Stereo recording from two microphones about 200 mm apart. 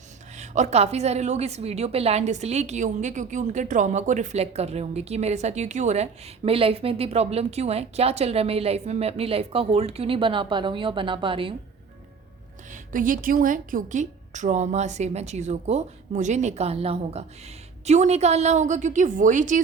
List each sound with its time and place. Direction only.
0.3 s a woman's voice: 35° right (ahead or behind)
12.7 s a woman's voice: 40° right (ahead or behind)